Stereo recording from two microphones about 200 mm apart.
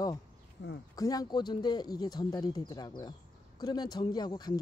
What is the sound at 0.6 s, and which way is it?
Speech, 60° left (ahead or behind).